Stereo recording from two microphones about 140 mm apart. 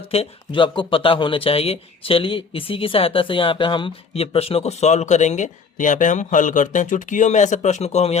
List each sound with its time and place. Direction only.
0.1 s speech: 40° left (ahead or behind)